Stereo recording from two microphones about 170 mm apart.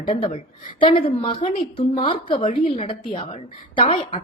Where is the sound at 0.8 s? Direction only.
30° left (ahead or behind).